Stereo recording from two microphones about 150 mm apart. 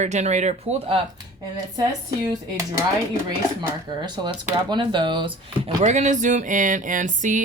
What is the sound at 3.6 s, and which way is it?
A woman's voice, 30° right (ahead or behind).